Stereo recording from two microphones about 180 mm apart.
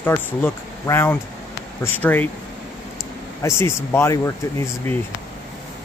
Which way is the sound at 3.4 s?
15° left (ahead or behind).